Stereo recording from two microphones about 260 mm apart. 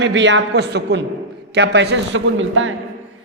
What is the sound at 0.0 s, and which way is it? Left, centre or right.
A man's voice, right.